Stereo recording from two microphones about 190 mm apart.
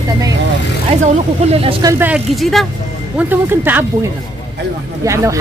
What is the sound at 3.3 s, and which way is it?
Speech, 10° right (ahead or behind).